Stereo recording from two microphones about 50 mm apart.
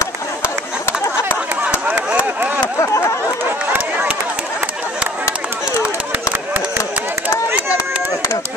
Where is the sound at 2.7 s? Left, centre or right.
Left.